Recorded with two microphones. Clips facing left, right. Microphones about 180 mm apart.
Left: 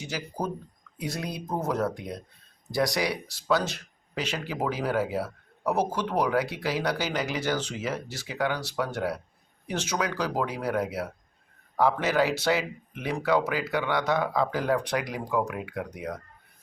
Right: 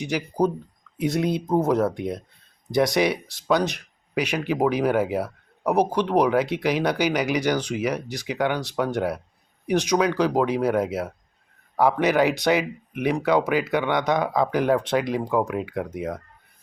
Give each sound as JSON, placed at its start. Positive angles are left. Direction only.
{"t": 0.9, "sound": "speech", "side_deg": -20}